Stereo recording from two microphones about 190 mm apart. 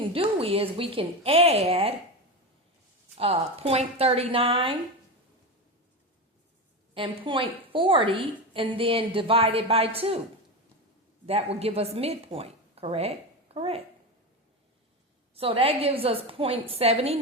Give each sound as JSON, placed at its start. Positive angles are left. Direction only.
{"t": 0.1, "sound": "a woman's voice", "side_deg": -30}
{"t": 3.2, "sound": "a woman's voice", "side_deg": -30}
{"t": 6.9, "sound": "a woman's voice", "side_deg": -25}
{"t": 11.3, "sound": "a woman's voice", "side_deg": -30}
{"t": 15.4, "sound": "a woman's voice", "side_deg": -30}